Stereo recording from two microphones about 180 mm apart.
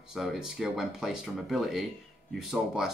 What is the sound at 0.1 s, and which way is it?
Speech, centre (ahead or behind).